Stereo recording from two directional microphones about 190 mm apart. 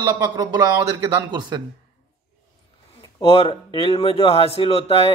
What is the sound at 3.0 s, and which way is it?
A man's voice, 25° left (ahead or behind).